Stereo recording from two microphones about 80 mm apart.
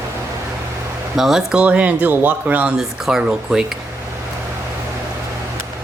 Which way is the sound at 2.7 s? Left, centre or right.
Centre.